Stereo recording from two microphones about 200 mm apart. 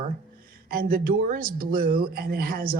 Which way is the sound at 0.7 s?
45° right (ahead or behind).